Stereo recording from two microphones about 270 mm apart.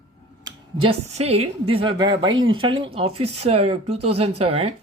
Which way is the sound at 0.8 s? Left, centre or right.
Right.